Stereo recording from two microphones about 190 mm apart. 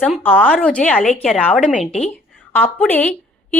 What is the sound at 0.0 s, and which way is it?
A woman's voice, 5° left (ahead or behind).